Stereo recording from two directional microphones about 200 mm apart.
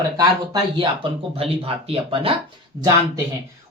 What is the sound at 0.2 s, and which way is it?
Speech, 20° right (ahead or behind).